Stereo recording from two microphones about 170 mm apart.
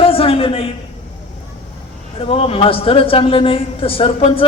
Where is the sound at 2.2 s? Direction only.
35° left (ahead or behind).